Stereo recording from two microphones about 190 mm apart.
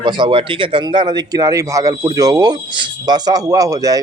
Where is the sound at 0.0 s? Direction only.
25° right (ahead or behind).